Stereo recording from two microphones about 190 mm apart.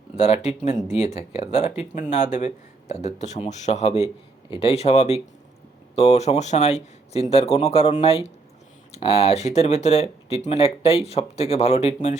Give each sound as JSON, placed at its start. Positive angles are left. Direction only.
{"t": 0.2, "sound": "speech", "side_deg": 35}